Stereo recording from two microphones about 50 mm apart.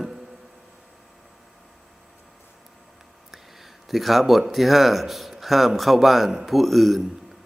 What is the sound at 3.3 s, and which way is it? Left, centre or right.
Speech, centre.